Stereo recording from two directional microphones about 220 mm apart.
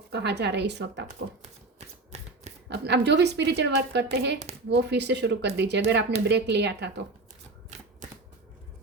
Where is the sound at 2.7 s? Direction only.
50° right (ahead or behind).